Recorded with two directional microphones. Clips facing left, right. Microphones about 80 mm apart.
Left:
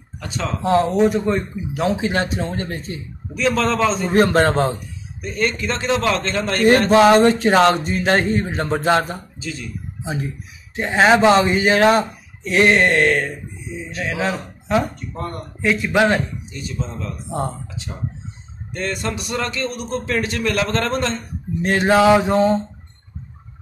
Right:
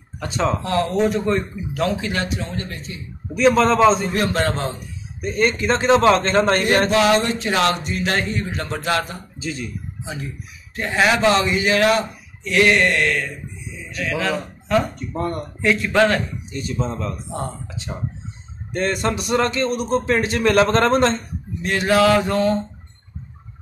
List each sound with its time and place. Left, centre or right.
0.2 s a man's voice: right
0.9 s speech: centre
1.9 s speech: left
3.3 s speech: right
4.1 s speech: left
5.2 s a man's voice: right
6.9 s speech: left
9.4 s a man's voice: right
10.0 s speech: left
15.6 s speech: centre
16.5 s a man's voice: right
18.7 s speech: right
20.4 s a man's voice: right
21.6 s speech: left